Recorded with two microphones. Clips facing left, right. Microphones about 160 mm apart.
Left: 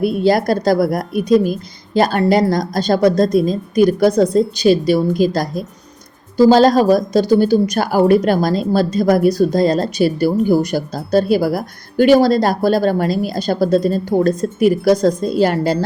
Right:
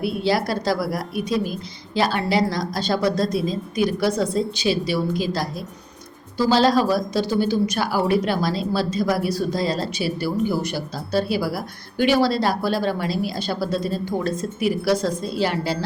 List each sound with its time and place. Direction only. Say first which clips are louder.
0.0 s a woman's voice: left 7 dB; 50° left (ahead or behind)